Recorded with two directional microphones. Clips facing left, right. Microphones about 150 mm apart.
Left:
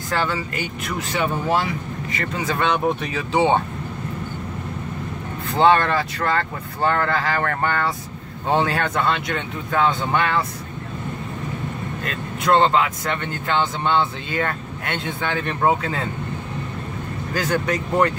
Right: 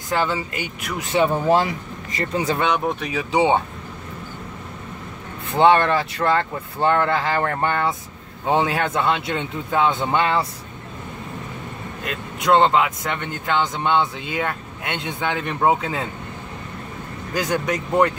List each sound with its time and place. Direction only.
0.1 s speech: 20° right (ahead or behind)
1.1 s speech: 30° right (ahead or behind)
2.6 s speech: 10° right (ahead or behind)
5.6 s speech: 20° right (ahead or behind)
12.0 s speech: 15° right (ahead or behind)
17.3 s speech: 15° right (ahead or behind)